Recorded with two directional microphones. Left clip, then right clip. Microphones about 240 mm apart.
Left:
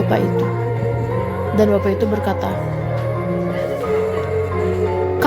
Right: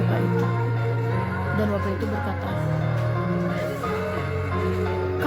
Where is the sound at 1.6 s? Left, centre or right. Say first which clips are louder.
Left 13 dB; left.